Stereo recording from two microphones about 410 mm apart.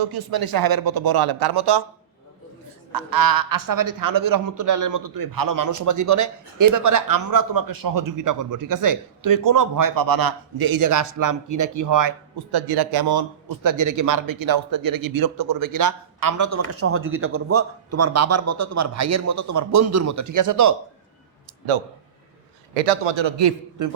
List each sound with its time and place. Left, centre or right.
0.0 s speech: right
2.9 s a man's voice: right
12.5 s a man's voice: right
23.1 s a man's voice: right